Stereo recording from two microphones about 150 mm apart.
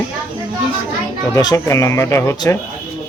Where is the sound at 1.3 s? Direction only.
25° left (ahead or behind).